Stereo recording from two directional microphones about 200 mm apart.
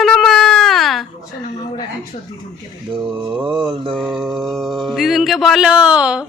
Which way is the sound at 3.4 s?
25° right (ahead or behind).